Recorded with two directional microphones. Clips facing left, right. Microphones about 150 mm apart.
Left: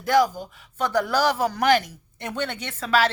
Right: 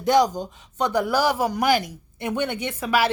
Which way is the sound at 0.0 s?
20° right (ahead or behind).